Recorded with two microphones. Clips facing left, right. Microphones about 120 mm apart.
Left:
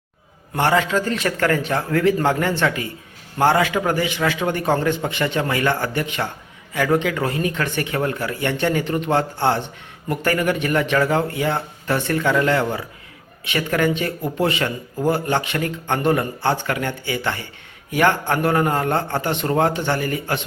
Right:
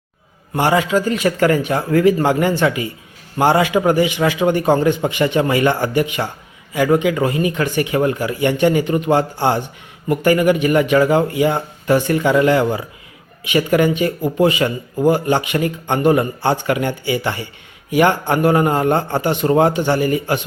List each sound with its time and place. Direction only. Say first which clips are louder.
0.5 s speech: right 3 dB; 10° right (ahead or behind)